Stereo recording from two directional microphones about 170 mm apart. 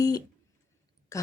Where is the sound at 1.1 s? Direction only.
15° left (ahead or behind).